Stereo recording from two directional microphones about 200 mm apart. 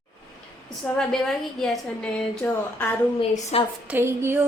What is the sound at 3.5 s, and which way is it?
Speech, 30° left (ahead or behind).